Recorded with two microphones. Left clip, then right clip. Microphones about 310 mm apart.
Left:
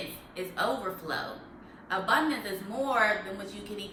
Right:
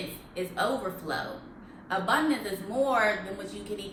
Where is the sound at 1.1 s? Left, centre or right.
Centre.